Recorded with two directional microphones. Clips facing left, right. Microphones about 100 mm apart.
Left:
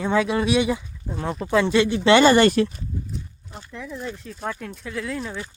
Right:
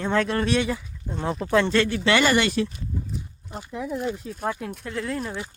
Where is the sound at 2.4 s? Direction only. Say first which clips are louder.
Left 6 dB; 50° left (ahead or behind).